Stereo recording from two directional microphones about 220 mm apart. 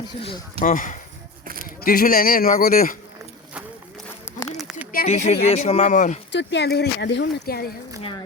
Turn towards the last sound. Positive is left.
turn(degrees=45)  # may be behind; listen again after turning